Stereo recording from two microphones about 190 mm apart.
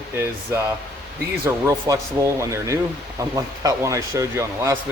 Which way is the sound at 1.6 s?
15° right (ahead or behind).